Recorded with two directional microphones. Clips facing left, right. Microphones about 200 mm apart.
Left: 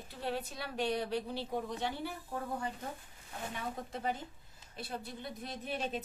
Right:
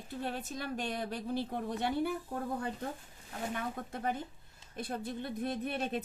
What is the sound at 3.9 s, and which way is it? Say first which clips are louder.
A woman's voice: right 2 dB; 55° right (ahead or behind).